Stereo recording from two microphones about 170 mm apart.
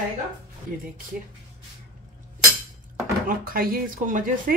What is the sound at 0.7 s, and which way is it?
Speech, 55° right (ahead or behind).